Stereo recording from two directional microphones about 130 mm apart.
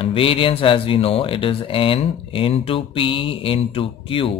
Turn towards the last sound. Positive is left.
turn(degrees=45)  # may be behind; listen again after turning